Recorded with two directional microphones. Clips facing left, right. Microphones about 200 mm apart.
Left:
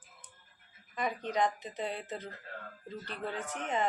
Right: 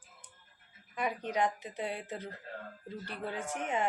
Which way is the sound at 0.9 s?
10° right (ahead or behind).